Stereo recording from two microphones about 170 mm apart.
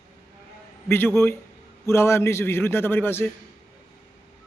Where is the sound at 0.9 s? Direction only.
15° left (ahead or behind).